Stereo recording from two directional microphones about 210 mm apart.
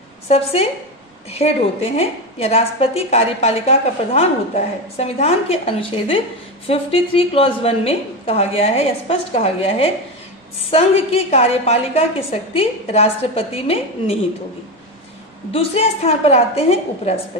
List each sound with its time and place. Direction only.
0.3 s a woman's voice: 30° left (ahead or behind)
15.5 s a woman's voice: 30° left (ahead or behind)